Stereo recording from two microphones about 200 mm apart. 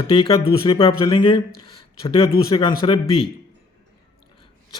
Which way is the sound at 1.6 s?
30° left (ahead or behind).